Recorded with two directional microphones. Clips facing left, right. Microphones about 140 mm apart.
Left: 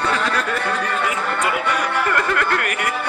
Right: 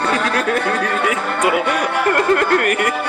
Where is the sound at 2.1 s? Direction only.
40° right (ahead or behind).